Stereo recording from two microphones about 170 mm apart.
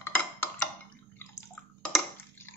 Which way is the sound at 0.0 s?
15° left (ahead or behind).